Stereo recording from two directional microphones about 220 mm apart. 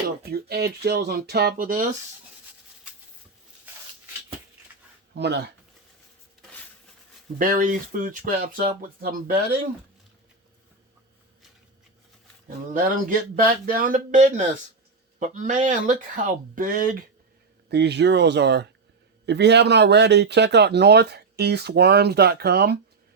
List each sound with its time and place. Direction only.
0.2 s speech: 45° right (ahead or behind)
5.1 s speech: 50° right (ahead or behind)
7.3 s speech: 40° right (ahead or behind)
12.7 s speech: 40° right (ahead or behind)
17.7 s speech: 50° right (ahead or behind)